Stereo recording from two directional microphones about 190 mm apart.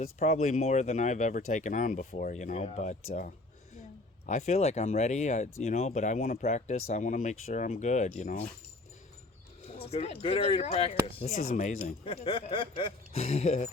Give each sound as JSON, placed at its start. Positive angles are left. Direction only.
{"t": 0.0, "sound": "speech", "side_deg": 35}
{"t": 4.3, "sound": "speech", "side_deg": 35}
{"t": 9.6, "sound": "speech", "side_deg": 30}